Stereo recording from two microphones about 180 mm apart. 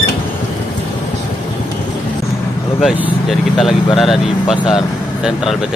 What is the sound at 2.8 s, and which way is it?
Speech, centre (ahead or behind).